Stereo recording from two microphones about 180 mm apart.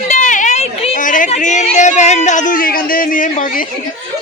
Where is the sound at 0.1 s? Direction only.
45° left (ahead or behind).